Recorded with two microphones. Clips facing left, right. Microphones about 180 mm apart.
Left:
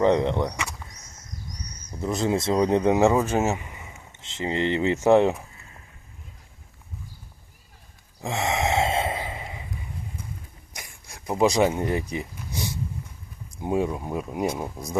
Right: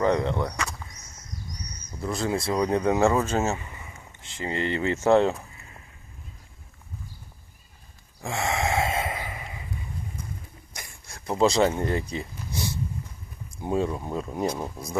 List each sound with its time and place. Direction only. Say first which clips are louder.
0.0 s speech: left 3 dB; 20° left (ahead or behind)
1.9 s speech: left 3 dB; 20° left (ahead or behind)
8.2 s gasp: left 2 dB; 20° left (ahead or behind)
10.8 s a sound: left 1 dB; 15° left (ahead or behind)
13.6 s speech: left 1 dB; 15° left (ahead or behind)